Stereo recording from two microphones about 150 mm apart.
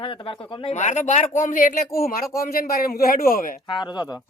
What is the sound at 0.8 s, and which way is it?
Speech, 50° left (ahead or behind).